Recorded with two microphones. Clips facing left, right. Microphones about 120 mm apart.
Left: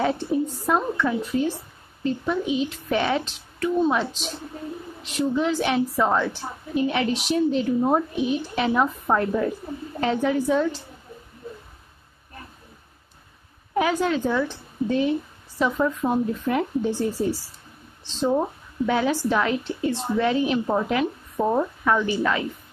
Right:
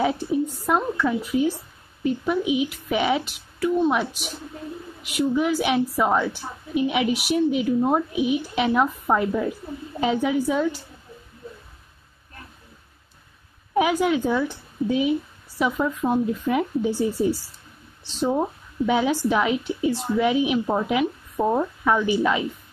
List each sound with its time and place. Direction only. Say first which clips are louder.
0.0 s a woman's voice: even; 10° right (ahead or behind)
13.7 s a woman's voice: right 2 dB; 15° right (ahead or behind)
18.9 s a woman's voice: right 1 dB; 15° right (ahead or behind)
21.4 s speech: even; centre (ahead or behind)
21.8 s a woman's voice: right 3 dB; 15° right (ahead or behind)